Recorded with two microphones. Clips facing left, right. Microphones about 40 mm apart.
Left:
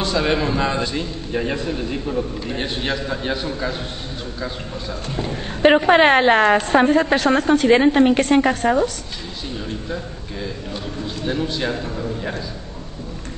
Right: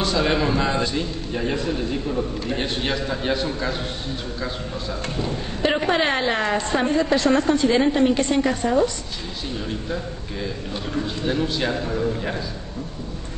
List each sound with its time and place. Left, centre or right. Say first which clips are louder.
0.1 s a man's voice: left 2 dB; centre
5.1 s a woman's voice: left 1 dB; left
9.5 s a man's voice: even; centre